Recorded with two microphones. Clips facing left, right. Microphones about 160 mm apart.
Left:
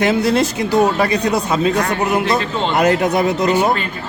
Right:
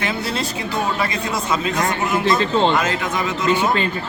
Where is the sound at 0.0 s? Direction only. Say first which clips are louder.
Left 9 dB; 75° left (ahead or behind).